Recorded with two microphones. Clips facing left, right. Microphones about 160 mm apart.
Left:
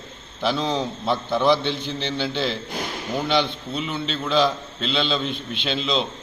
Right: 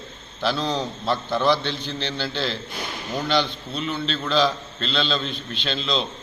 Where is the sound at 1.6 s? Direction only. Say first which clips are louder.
Left 3 dB; 55° left (ahead or behind).